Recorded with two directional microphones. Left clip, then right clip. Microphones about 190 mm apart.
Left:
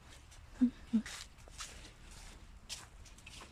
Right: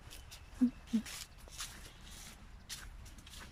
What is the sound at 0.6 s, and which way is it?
Speech, centre (ahead or behind).